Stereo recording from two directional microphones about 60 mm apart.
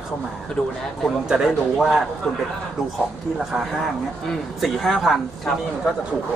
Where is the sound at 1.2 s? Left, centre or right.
Centre.